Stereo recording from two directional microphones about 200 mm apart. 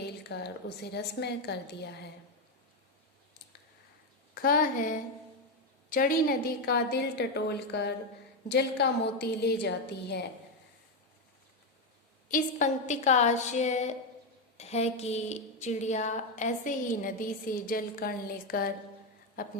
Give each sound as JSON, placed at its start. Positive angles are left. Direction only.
{"t": 0.0, "sound": "a woman's voice", "side_deg": 55}
{"t": 4.4, "sound": "a woman's voice", "side_deg": 45}
{"t": 12.3, "sound": "a woman's voice", "side_deg": 40}